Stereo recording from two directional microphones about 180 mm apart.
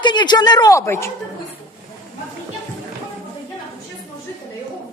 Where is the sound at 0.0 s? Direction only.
25° left (ahead or behind).